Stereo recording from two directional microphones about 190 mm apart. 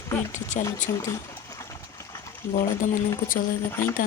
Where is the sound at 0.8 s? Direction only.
15° left (ahead or behind).